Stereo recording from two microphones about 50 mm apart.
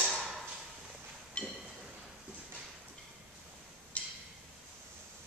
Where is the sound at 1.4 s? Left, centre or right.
Left.